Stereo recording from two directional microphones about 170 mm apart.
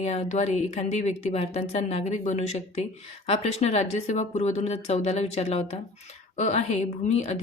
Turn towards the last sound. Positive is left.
turn(degrees=40)  # may be behind; listen again after turning